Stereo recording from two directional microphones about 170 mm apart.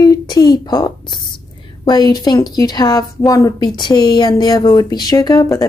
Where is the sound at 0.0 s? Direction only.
20° left (ahead or behind).